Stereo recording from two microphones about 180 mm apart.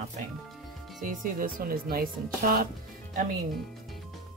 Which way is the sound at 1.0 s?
50° right (ahead or behind).